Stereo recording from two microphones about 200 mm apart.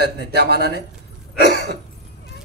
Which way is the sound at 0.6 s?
55° left (ahead or behind).